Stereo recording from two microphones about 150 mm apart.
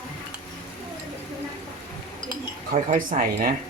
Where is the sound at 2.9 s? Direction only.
70° right (ahead or behind).